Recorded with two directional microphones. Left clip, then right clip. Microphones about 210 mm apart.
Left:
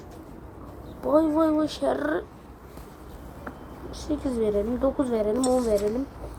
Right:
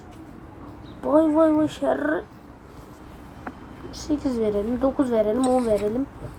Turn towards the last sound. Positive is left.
turn(degrees=5)  # may be behind; listen again after turning